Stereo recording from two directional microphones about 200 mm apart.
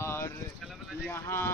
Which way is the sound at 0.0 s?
15° left (ahead or behind).